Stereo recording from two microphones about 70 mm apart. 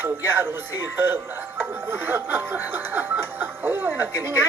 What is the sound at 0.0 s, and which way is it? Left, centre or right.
Speech, right.